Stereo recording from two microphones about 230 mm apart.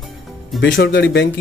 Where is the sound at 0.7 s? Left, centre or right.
Left.